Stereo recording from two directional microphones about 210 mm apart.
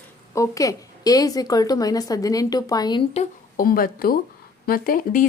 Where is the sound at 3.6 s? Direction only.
45° left (ahead or behind).